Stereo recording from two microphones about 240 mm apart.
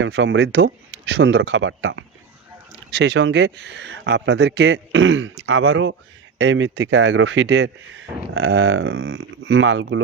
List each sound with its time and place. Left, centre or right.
0.0 s speech: right